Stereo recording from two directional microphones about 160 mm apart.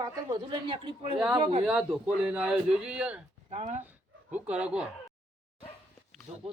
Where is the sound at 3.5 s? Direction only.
45° right (ahead or behind).